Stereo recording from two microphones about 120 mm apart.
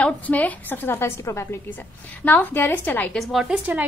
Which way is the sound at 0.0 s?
10° left (ahead or behind).